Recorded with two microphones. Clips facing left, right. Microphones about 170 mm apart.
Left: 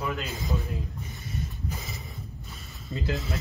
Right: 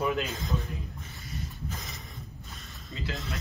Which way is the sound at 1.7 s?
5° left (ahead or behind).